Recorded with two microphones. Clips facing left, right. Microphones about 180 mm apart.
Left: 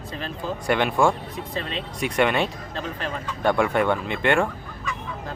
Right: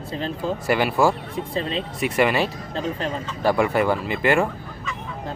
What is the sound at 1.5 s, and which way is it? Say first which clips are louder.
Speech: right 5 dB; 30° right (ahead or behind).